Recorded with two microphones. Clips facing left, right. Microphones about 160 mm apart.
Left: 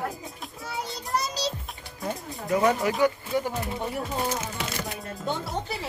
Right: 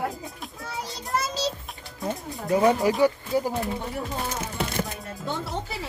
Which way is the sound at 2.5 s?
30° right (ahead or behind).